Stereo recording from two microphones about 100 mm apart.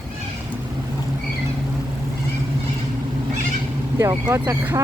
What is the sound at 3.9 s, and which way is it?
Speech, 30° right (ahead or behind).